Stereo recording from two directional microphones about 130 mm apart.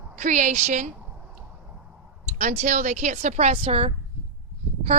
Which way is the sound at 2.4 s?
70° right (ahead or behind).